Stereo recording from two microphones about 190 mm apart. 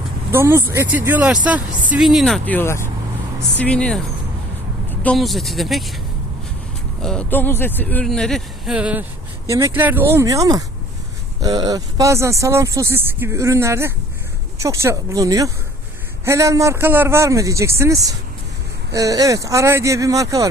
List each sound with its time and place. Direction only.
0.3 s speech: 15° right (ahead or behind); by 4.0 s 5° left (ahead or behind)
5.0 s speech: centre (ahead or behind)
7.0 s speech: 5° left (ahead or behind); by 20.5 s 15° right (ahead or behind)